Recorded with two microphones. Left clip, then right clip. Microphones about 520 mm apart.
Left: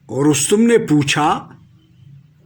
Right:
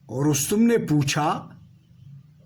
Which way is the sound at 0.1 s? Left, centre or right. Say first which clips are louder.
Left 9 dB; right.